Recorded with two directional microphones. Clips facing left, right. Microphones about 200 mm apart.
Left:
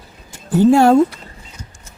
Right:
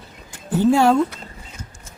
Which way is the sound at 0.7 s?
50° left (ahead or behind).